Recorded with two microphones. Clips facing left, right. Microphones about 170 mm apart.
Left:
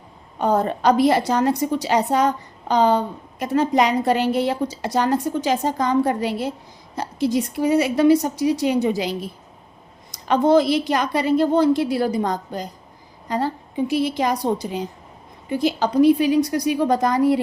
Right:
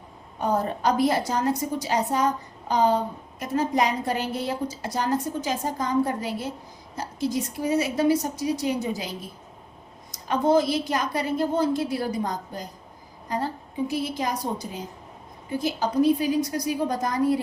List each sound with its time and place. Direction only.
0.3 s a woman's voice: 75° left (ahead or behind)